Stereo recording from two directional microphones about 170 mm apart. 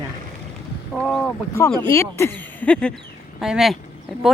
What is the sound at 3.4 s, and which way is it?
Speech, centre (ahead or behind).